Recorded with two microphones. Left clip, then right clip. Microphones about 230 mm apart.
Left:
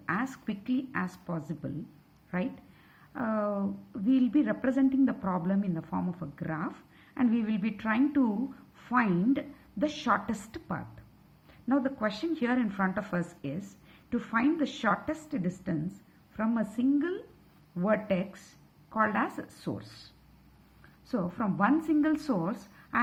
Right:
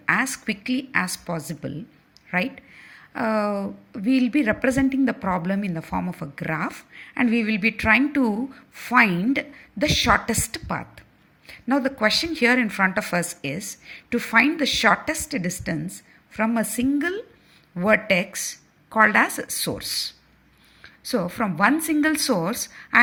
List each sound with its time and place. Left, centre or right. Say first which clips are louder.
0.0 s speech: right 11 dB; right
3.1 s a woman's voice: right 8 dB; right
21.1 s speech: right 8 dB; right